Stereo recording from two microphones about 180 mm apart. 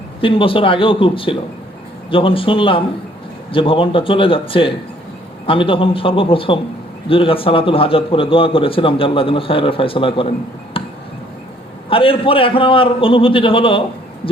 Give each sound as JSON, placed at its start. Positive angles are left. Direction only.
{"t": 0.2, "sound": "a man's voice", "side_deg": 30}
{"t": 10.8, "sound": "chop", "side_deg": 30}
{"t": 11.9, "sound": "a man's voice", "side_deg": 30}